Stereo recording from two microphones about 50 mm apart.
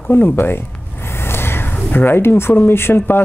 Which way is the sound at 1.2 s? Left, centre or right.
Left.